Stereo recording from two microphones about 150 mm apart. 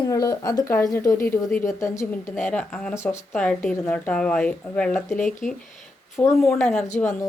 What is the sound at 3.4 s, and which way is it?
Speech, 5° left (ahead or behind).